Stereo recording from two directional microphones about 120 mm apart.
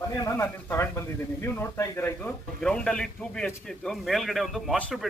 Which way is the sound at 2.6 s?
5° left (ahead or behind).